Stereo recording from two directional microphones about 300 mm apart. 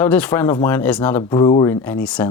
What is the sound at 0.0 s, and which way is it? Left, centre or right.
Speech, centre.